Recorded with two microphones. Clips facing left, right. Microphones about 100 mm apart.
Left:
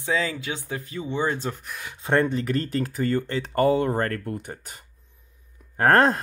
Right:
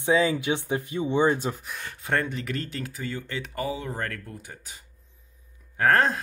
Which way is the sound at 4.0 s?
50° left (ahead or behind).